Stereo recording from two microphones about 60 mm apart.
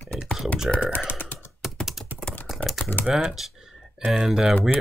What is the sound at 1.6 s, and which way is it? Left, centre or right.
Typing, centre.